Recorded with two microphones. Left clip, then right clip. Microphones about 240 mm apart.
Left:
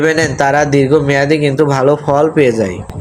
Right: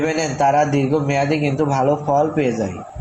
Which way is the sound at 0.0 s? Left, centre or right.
Left.